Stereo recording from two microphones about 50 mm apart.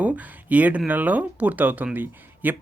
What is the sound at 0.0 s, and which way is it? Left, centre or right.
Speech, right.